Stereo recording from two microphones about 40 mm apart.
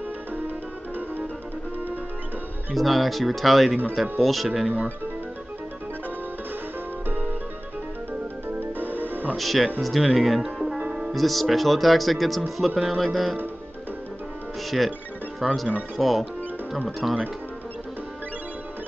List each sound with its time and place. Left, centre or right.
2.7 s speech: centre
8.5 s music: right
9.4 s speech: centre
15.4 s speech: centre